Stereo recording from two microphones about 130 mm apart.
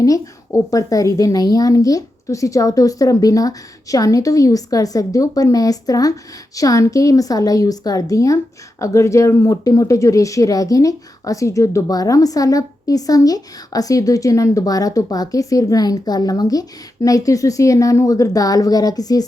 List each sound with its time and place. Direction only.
0.0 s speech: 25° left (ahead or behind)